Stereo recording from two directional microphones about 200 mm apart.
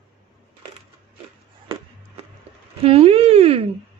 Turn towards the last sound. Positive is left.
turn(degrees=-30)  # may be behind; listen again after turning